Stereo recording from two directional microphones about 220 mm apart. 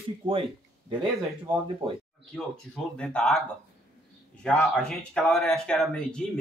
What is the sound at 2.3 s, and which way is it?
Speech, 5° left (ahead or behind).